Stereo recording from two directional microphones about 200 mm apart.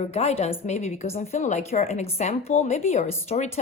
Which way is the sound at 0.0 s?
30° left (ahead or behind).